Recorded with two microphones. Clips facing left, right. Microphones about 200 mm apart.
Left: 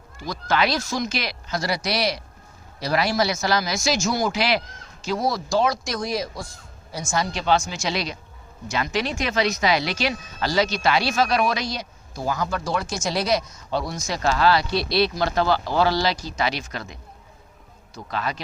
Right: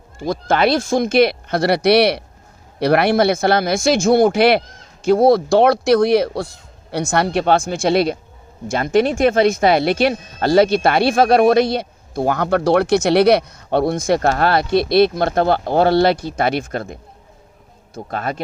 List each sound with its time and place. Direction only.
0.3 s speech: 50° right (ahead or behind)